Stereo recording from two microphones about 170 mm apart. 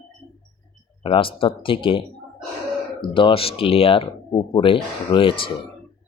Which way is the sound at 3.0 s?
30° left (ahead or behind).